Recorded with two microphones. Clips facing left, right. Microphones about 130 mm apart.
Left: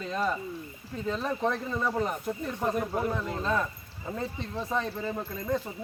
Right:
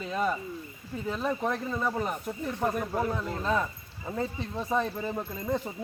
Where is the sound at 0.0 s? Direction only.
5° right (ahead or behind).